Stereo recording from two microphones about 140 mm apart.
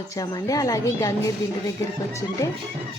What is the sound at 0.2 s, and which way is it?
Speech, 25° left (ahead or behind).